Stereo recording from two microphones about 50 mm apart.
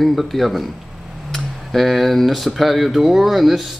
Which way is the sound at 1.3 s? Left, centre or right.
Centre.